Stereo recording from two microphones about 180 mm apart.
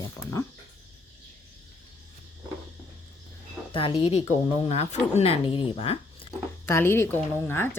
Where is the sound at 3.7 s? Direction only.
30° left (ahead or behind).